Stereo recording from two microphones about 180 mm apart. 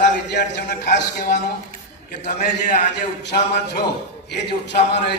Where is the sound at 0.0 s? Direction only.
70° left (ahead or behind).